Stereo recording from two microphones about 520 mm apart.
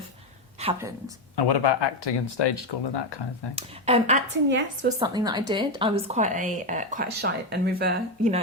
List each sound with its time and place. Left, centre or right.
0.6 s a woman's voice: centre
1.4 s speech: left
3.5 s a woman's voice: centre
4.9 s a woman's voice: centre